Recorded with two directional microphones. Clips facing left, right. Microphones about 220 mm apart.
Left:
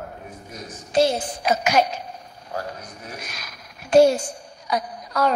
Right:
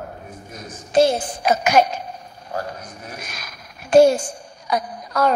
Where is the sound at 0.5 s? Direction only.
50° right (ahead or behind).